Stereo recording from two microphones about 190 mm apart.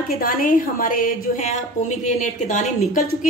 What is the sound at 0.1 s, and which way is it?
A woman's voice, 50° left (ahead or behind).